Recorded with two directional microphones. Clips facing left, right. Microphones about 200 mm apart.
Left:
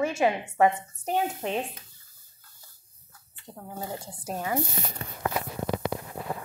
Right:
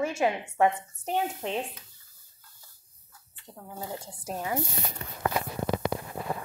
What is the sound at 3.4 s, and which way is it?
Speech, 10° left (ahead or behind).